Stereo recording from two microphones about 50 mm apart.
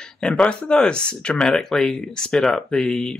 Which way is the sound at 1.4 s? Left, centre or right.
Centre.